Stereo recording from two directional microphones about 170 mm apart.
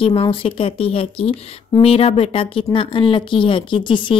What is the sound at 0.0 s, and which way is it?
A woman's voice, 30° left (ahead or behind).